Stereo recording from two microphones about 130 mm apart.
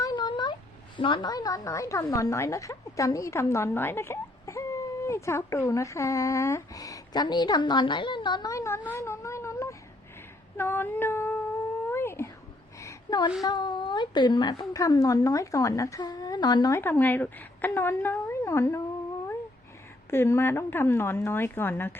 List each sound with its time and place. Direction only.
0.0 s a sound: 35° left (ahead or behind)
0.9 s a woman's voice: 40° left (ahead or behind); by 8.8 s 20° left (ahead or behind)
8.9 s whimper: 20° left (ahead or behind)
10.6 s female singing: 15° left (ahead or behind)
11.9 s whispering: 20° left (ahead or behind)
12.8 s a sound: 25° left (ahead or behind)
13.4 s a woman's voice: 35° left (ahead or behind)
16.7 s a woman's voice: 15° left (ahead or behind)
20.1 s a woman's voice: 20° left (ahead or behind)